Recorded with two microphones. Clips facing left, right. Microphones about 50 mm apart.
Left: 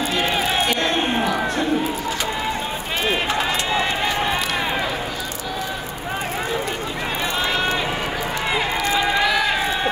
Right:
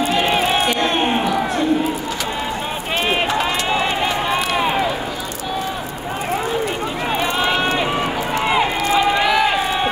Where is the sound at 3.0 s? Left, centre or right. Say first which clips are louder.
Right 3 dB; right.